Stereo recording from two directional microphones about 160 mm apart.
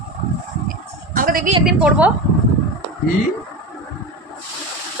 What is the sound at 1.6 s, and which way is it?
Speech, 5° right (ahead or behind).